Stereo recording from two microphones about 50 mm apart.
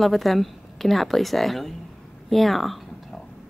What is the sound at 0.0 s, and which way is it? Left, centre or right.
A woman's voice, centre.